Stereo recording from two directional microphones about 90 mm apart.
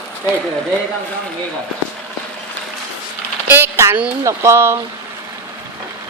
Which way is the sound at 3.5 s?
25° right (ahead or behind).